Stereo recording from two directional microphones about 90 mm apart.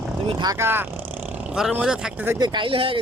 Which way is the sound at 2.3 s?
55° right (ahead or behind).